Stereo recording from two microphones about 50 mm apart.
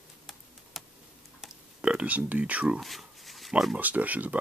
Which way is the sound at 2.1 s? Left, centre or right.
Right.